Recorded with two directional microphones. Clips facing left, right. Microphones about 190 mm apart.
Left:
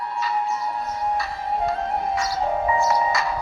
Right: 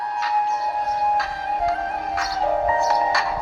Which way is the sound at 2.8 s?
60° right (ahead or behind).